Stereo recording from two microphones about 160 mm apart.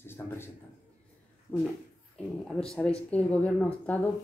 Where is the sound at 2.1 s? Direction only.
5° left (ahead or behind).